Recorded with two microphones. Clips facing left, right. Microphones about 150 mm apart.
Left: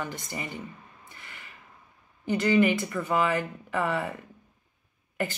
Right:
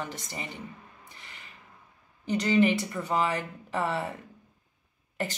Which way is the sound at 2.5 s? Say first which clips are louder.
Even; 30° right (ahead or behind).